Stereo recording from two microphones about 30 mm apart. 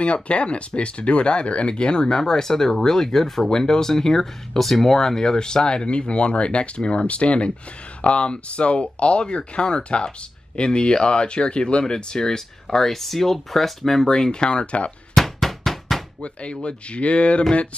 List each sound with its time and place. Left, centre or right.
0.0 s speech: left
2.0 s speech: centre
3.4 s speech: left
5.9 s speech: left
12.6 s speech: centre
14.0 s speech: left
15.1 s a sound: centre
16.2 s speech: left